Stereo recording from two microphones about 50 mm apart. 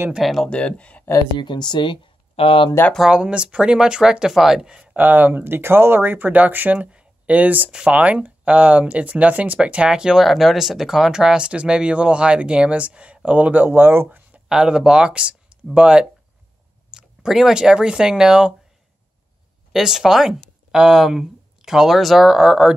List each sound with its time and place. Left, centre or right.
0.2 s speech: centre
0.5 s speech: left
3.1 s speech: centre
4.9 s speech: right; by 10.2 s centre
10.2 s speech: centre; by 14.0 s right
14.0 s a sound: right
14.5 s speech: centre
19.7 s speech: centre
22.4 s speech: centre